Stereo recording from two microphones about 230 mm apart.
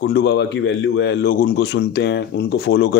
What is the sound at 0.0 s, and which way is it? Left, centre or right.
A man's voice, left.